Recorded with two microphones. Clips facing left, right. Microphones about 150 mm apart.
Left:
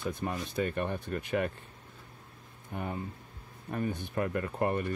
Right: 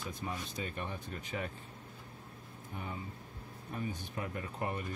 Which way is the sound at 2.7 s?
55° left (ahead or behind).